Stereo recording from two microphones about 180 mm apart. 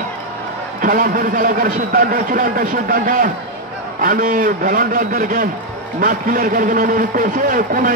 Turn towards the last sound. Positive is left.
turn(degrees=-50)  # may be behind; listen again after turning